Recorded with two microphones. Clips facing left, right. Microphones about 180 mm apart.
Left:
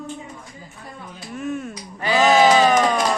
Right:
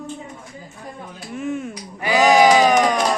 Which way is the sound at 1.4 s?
20° right (ahead or behind).